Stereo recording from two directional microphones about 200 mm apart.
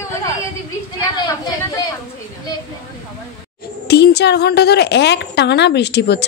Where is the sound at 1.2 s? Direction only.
20° left (ahead or behind).